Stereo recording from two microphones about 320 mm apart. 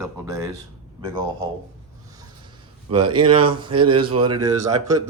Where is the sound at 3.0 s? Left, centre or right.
Right.